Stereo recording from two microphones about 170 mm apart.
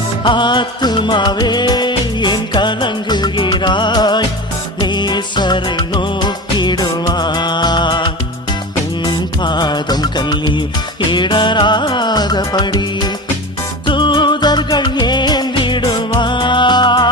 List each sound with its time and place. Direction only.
0.3 s music: 25° left (ahead or behind)